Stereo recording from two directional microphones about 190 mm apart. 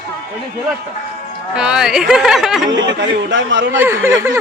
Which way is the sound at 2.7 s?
75° right (ahead or behind).